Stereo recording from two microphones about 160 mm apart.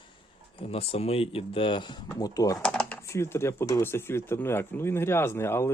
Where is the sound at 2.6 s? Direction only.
5° left (ahead or behind).